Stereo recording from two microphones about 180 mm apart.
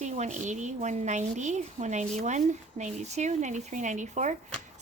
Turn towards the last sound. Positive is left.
turn(degrees=-40)  # may be behind; listen again after turning